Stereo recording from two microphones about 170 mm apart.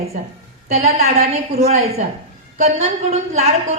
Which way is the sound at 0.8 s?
40° right (ahead or behind).